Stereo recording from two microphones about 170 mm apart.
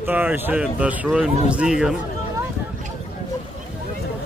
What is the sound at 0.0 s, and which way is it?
Speech, 10° right (ahead or behind).